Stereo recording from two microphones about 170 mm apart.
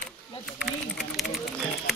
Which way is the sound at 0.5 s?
5° right (ahead or behind).